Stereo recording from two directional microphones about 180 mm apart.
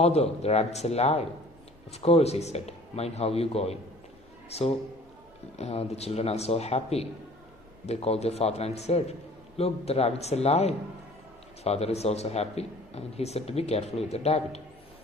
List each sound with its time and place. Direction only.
0.0 s a man's voice: 35° left (ahead or behind)